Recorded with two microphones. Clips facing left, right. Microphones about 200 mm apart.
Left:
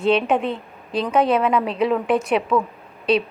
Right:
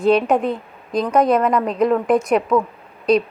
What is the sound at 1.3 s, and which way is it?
Speech, 5° left (ahead or behind).